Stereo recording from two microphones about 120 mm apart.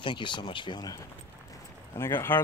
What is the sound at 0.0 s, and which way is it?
Speech, 40° left (ahead or behind).